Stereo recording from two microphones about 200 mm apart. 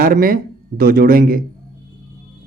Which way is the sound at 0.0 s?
45° right (ahead or behind).